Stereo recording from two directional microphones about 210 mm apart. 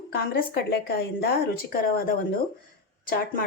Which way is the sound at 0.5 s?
50° left (ahead or behind).